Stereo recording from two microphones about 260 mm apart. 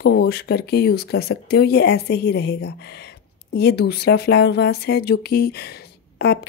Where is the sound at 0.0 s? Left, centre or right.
Left.